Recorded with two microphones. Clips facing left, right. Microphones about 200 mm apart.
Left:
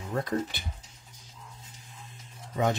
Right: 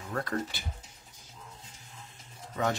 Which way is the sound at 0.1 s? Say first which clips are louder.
Left 3 dB; 20° left (ahead or behind).